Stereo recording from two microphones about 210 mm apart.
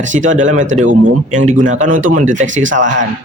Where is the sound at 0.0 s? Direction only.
35° right (ahead or behind).